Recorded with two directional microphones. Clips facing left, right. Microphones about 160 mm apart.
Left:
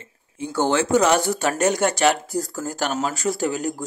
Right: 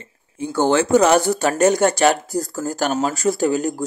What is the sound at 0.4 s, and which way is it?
Speech, 45° right (ahead or behind).